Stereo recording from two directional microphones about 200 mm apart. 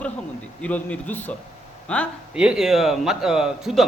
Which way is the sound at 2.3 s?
5° right (ahead or behind).